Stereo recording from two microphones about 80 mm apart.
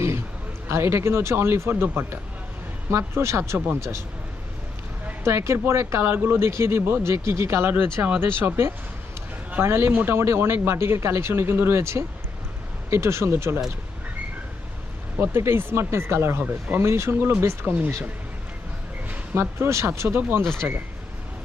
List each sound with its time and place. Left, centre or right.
0.7 s speech: right
5.2 s speech: right
15.2 s speech: right
19.0 s a sound: centre
19.4 s speech: right
20.6 s speech: right